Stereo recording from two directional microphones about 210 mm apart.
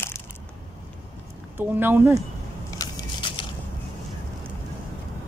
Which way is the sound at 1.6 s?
10° right (ahead or behind).